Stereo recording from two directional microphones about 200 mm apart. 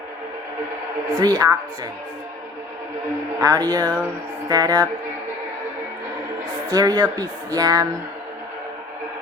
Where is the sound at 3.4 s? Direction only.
20° right (ahead or behind).